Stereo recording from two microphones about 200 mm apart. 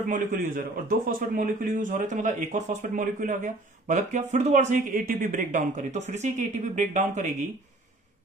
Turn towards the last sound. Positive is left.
turn(degrees=-35)  # may be behind; listen again after turning